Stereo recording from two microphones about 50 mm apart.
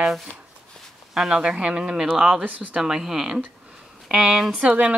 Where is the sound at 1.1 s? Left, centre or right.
Centre.